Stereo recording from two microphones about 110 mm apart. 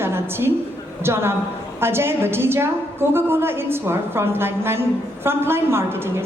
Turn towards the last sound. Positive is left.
turn(degrees=-20)  # may be behind; listen again after turning